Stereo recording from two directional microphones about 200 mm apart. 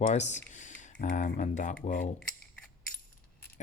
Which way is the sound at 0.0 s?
35° left (ahead or behind).